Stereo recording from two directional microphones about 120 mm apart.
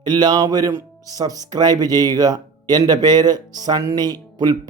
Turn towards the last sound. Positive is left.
turn(degrees=-35)  # may be behind; listen again after turning